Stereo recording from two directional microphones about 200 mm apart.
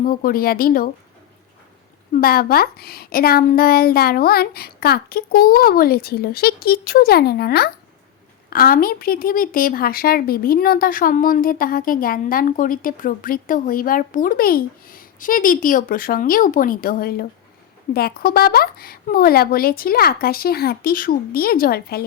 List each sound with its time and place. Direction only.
0.0 s a woman's voice: 45° left (ahead or behind)
2.1 s a woman's voice: 50° left (ahead or behind)